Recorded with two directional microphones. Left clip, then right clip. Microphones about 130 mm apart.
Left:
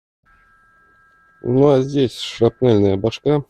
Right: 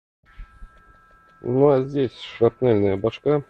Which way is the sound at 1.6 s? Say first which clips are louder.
Left 3 dB; 45° left (ahead or behind).